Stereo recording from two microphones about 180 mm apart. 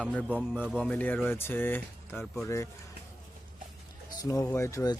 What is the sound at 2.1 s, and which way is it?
Speech, centre (ahead or behind).